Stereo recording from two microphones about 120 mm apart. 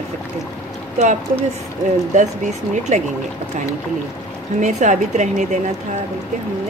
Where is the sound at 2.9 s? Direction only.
75° right (ahead or behind).